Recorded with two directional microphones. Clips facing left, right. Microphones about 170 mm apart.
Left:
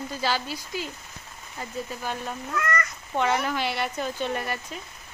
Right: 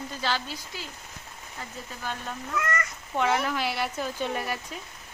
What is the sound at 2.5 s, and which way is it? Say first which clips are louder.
Speech: left 1 dB; 5° right (ahead or behind).